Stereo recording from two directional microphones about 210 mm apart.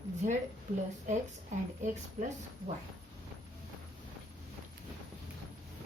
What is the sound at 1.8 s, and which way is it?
Speech, 35° right (ahead or behind).